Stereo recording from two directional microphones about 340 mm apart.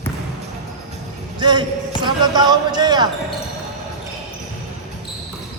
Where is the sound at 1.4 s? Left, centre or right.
Centre.